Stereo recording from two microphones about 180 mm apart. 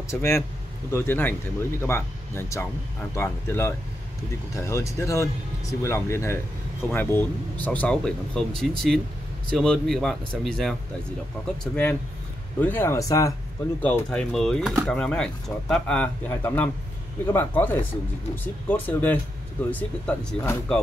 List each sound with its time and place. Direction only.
0.1 s speech: 15° left (ahead or behind)
13.8 s speech: 5° left (ahead or behind)